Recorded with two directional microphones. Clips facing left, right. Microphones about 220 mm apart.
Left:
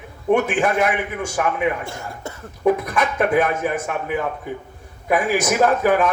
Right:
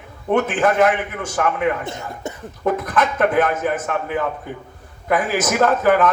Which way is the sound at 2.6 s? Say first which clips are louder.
Left 1 dB; 10° left (ahead or behind).